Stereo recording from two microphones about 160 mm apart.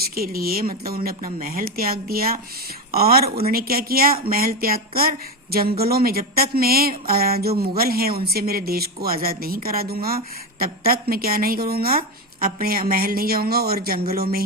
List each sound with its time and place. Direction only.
0.0 s speech: 70° right (ahead or behind)